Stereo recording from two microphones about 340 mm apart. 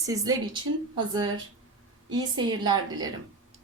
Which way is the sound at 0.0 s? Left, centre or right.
Centre.